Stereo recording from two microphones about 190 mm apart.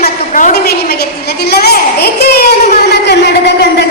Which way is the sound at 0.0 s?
50° left (ahead or behind).